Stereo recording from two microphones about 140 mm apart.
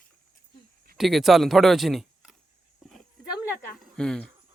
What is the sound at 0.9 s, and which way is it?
Speech, centre (ahead or behind).